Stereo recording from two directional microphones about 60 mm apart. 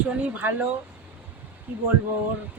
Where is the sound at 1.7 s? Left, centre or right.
Right.